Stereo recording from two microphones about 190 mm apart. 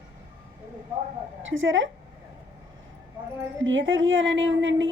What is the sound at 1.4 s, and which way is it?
Speech, 90° right.